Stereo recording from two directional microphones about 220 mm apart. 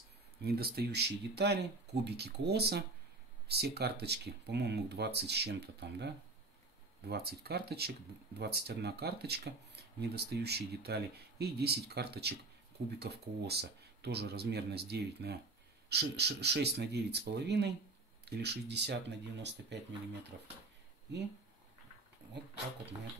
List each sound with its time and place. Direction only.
0.4 s speech: 45° right (ahead or behind)